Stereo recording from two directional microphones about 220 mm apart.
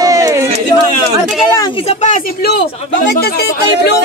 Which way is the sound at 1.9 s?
35° left (ahead or behind).